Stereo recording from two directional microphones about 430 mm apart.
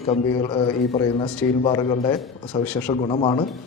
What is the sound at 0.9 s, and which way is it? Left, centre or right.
Speech, centre.